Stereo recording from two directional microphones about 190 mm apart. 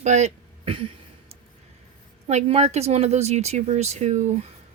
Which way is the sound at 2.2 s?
30° right (ahead or behind).